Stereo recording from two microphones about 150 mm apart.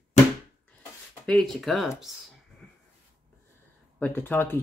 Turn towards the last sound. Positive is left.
turn(degrees=15)  # may be behind; listen again after turning